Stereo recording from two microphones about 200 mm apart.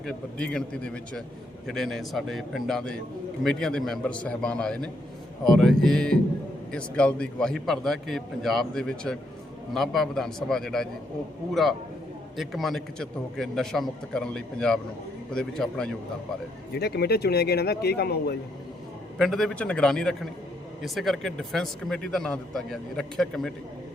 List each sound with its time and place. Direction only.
0.0 s speech: 5° left (ahead or behind)
12.4 s speech: centre (ahead or behind)
16.7 s speech: 55° left (ahead or behind)
19.2 s speech: 5° left (ahead or behind)